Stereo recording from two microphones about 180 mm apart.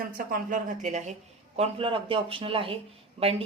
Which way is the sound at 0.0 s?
50° right (ahead or behind).